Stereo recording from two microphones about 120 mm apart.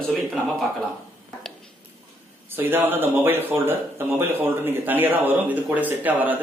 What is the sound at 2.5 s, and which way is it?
Speech, 15° right (ahead or behind).